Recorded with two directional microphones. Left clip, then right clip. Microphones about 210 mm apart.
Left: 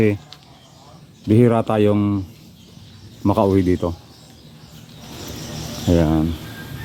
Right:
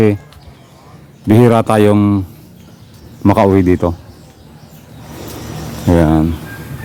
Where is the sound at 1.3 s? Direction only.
15° right (ahead or behind).